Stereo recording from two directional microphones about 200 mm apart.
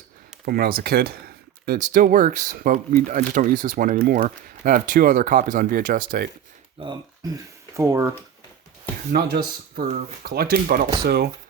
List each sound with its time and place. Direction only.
0.4 s speech: 50° right (ahead or behind)
6.7 s speech: 20° right (ahead or behind)
9.1 s speech: 50° right (ahead or behind)